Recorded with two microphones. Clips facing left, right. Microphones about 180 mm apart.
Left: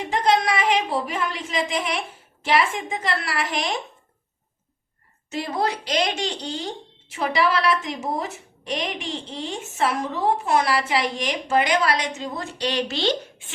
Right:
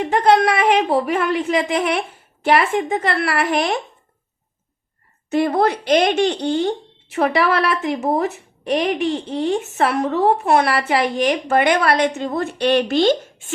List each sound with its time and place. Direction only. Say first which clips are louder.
0.0 s speech: right 6 dB; 60° right (ahead or behind)
5.3 s speech: right 8 dB; 55° right (ahead or behind)